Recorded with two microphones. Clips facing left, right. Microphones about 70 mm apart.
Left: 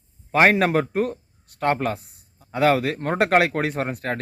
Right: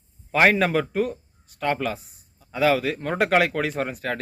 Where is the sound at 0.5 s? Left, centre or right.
Left.